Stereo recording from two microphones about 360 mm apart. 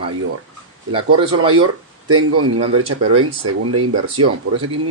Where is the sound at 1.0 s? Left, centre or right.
Right.